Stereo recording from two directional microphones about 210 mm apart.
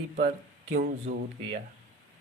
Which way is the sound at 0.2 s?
35° right (ahead or behind).